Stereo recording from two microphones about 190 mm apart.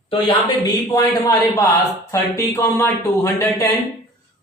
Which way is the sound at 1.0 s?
20° left (ahead or behind).